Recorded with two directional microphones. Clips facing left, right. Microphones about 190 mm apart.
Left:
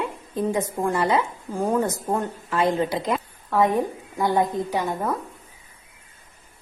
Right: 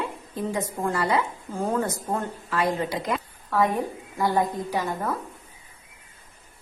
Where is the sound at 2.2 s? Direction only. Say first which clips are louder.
Left 3 dB; 25° left (ahead or behind).